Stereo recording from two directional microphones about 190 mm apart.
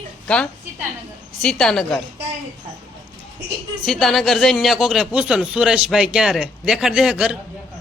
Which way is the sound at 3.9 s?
Centre (ahead or behind).